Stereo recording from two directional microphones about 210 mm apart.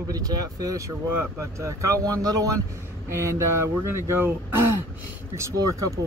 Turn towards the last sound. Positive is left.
turn(degrees=-15)  # may be behind; listen again after turning